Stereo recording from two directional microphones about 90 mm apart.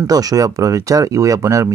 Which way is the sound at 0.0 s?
45° right (ahead or behind).